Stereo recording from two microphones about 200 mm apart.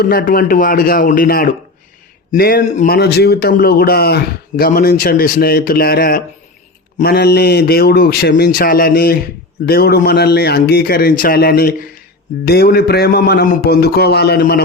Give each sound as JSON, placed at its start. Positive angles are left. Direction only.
{"t": 0.0, "sound": "a man's voice", "side_deg": 50}